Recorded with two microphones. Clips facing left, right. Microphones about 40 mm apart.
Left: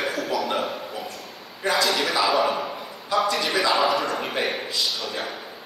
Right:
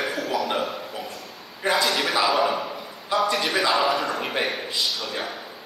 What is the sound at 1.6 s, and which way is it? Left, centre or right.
Speech, centre.